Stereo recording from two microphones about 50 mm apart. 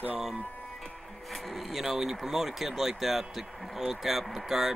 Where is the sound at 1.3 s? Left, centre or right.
Centre.